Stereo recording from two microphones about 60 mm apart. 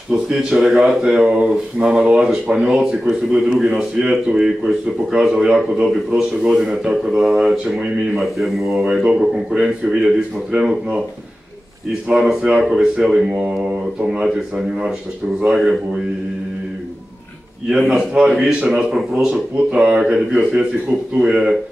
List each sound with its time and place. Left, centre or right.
0.1 s speech: centre
8.2 s speech: centre
8.8 s speech: centre
12.1 s speech: centre
13.3 s a man's voice: right
15.4 s speech: centre
17.6 s speech: centre
17.9 s a man's voice: right